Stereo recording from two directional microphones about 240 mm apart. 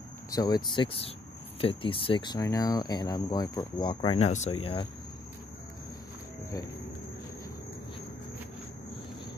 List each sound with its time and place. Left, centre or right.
0.3 s speech: centre